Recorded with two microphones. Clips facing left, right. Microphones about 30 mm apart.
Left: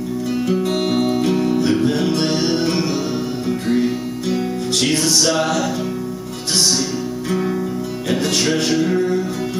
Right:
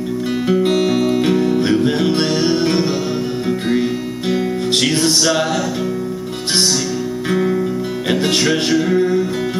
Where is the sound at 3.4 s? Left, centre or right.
Right.